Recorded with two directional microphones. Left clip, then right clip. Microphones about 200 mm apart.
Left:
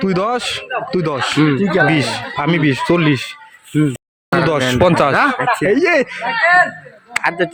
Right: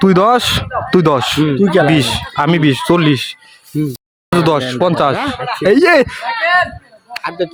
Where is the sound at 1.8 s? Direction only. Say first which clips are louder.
Right 2 dB; 15° right (ahead or behind).